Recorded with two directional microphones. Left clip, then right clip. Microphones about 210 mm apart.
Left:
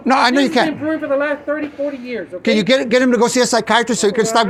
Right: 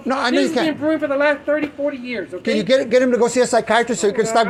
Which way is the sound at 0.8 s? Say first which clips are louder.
Right 1 dB; centre (ahead or behind).